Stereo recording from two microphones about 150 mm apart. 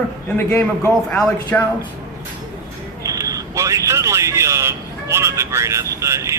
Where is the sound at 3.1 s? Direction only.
20° right (ahead or behind).